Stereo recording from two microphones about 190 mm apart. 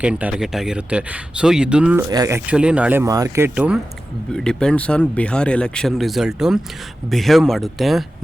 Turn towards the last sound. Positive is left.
turn(degrees=0)  # may be behind; listen again after turning